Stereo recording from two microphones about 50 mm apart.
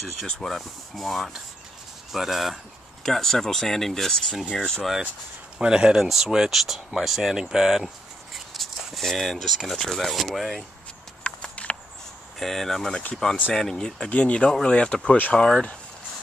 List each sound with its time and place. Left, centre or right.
0.5 s speech: centre
3.0 s speech: centre
5.6 s speech: centre
11.3 s horse: left
12.4 s speech: centre